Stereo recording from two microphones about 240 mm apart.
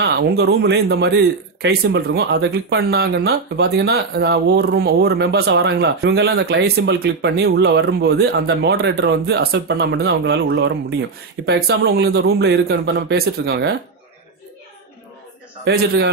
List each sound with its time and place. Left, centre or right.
0.0 s speech: right
15.6 s speech: right